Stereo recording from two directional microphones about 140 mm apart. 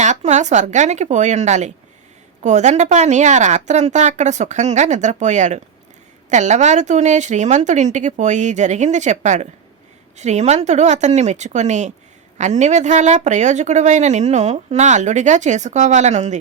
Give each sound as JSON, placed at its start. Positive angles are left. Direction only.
{"t": 0.0, "sound": "speech", "side_deg": -55}